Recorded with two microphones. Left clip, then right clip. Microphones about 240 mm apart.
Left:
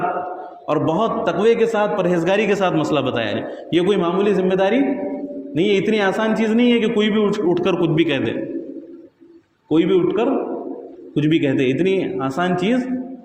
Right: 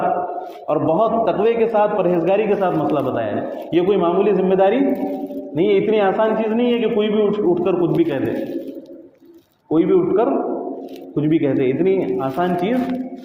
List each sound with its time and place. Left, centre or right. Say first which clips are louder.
0.7 s a man's voice: right 2 dB; left
9.6 s a man's voice: right 1 dB; left